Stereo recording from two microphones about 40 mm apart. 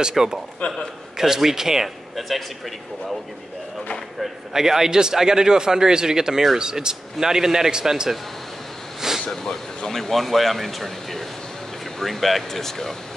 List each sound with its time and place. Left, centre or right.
0.1 s a man's voice: centre
2.1 s speech: centre
4.2 s a man's voice: centre
9.3 s speech: centre